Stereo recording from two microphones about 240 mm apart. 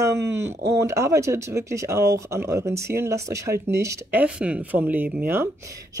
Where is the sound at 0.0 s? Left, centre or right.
Centre.